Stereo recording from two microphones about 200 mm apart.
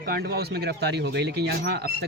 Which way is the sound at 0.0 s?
50° right (ahead or behind).